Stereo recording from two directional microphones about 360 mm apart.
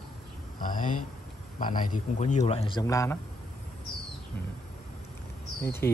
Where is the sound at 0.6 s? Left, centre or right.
Left.